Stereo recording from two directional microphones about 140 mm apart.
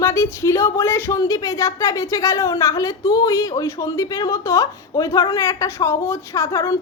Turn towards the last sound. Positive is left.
turn(degrees=20)  # may be behind; listen again after turning